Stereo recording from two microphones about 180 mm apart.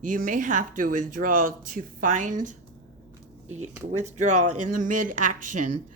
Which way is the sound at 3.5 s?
40° right (ahead or behind).